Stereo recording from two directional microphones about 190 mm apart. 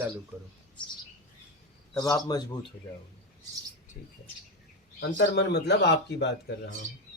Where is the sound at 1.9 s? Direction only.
20° left (ahead or behind).